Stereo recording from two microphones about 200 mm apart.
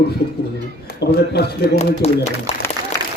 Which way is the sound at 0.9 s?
55° left (ahead or behind).